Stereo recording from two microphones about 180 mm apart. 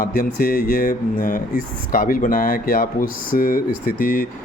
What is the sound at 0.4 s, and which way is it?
Speech, 50° left (ahead or behind).